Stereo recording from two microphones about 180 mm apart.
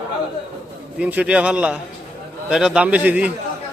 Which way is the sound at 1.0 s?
10° right (ahead or behind).